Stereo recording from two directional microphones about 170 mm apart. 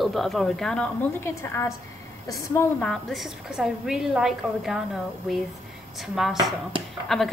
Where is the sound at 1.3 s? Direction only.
15° left (ahead or behind).